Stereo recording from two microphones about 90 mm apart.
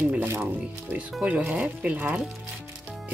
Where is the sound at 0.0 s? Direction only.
20° right (ahead or behind).